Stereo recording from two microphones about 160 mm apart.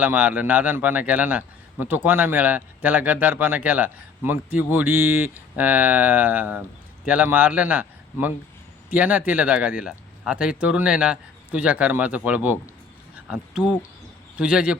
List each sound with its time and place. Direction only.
0.0 s speech: 10° right (ahead or behind)